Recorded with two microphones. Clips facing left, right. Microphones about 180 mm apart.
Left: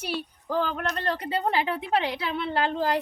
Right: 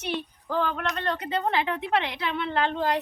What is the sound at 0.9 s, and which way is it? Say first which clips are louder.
A woman's voice: even; 35° left (ahead or behind).